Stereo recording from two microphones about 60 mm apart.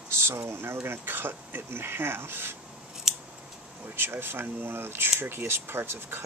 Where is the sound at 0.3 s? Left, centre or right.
Right.